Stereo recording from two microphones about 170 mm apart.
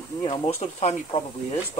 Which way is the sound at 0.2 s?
40° left (ahead or behind).